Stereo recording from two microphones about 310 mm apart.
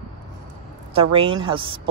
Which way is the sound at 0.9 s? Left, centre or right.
Centre.